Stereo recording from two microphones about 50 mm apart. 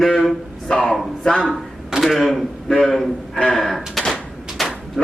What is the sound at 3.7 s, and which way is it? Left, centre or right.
Speech, centre.